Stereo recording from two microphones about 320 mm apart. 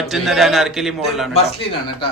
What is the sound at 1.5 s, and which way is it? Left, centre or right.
Speech, centre.